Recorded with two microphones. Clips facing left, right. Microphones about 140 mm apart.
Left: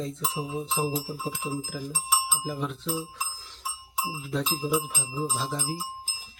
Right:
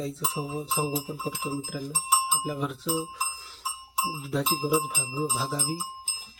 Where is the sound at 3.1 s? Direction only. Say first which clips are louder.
Right 2 dB; 5° right (ahead or behind).